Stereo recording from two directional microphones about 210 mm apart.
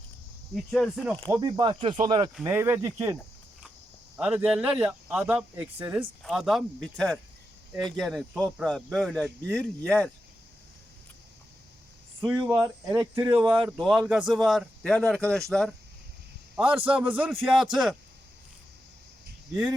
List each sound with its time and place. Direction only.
0.7 s speech: 5° left (ahead or behind)
1.3 s speech: 20° right (ahead or behind)
4.2 s speech: 5° right (ahead or behind)
12.5 s speech: 5° right (ahead or behind)